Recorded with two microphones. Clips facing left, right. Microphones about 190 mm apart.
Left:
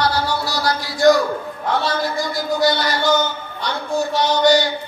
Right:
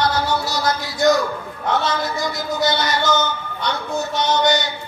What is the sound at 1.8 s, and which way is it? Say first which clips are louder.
A man's voice: left 1 dB; 20° right (ahead or behind).